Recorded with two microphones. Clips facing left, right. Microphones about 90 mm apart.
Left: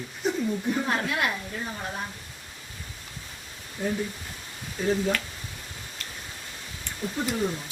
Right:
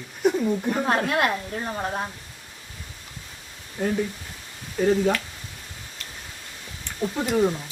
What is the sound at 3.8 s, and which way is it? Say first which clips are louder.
Speech: right 4 dB; 90° right.